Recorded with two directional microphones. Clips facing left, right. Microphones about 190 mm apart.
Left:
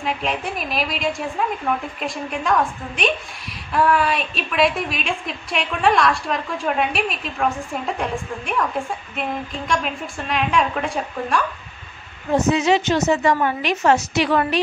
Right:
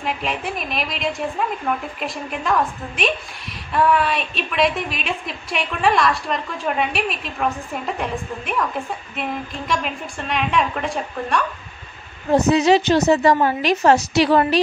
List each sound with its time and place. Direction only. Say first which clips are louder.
0.0 s a woman's voice: left 1 dB; centre (ahead or behind)
12.3 s a woman's voice: right 3 dB; 35° right (ahead or behind)